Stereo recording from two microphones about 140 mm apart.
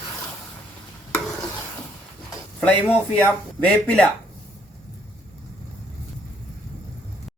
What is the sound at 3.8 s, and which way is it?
Speech, 10° left (ahead or behind).